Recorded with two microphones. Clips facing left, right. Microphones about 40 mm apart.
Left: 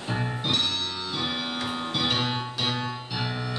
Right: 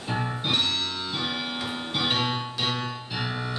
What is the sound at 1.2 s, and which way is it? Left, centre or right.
Bell, centre.